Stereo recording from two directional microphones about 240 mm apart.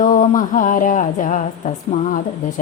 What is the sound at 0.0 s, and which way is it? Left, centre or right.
A woman's voice, left.